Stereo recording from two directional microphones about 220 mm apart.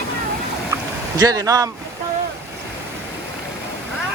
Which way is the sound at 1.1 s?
15° right (ahead or behind).